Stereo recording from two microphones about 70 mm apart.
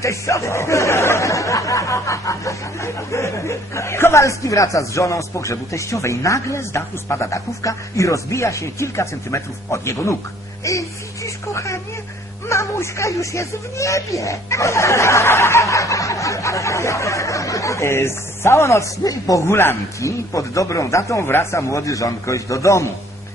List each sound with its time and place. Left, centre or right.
0.0 s speech: left
19.0 s speech: left
19.4 s speech: left
21.3 s speech: left